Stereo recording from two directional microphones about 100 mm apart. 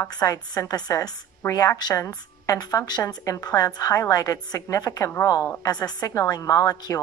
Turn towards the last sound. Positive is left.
turn(degrees=35)  # may be behind; listen again after turning